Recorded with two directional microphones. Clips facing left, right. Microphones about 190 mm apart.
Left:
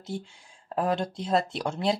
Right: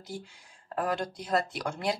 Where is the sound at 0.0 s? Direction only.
25° left (ahead or behind).